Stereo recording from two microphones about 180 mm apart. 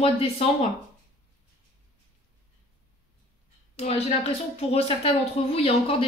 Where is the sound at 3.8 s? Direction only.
35° left (ahead or behind).